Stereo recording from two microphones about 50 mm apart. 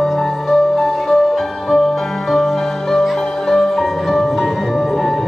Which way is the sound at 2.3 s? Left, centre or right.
Centre.